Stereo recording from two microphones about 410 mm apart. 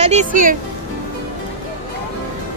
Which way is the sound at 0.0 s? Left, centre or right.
Centre.